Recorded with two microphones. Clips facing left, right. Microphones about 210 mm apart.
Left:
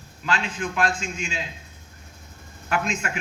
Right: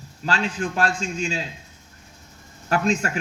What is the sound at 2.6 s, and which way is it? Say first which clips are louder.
Speech: right 5 dB; 40° right (ahead or behind).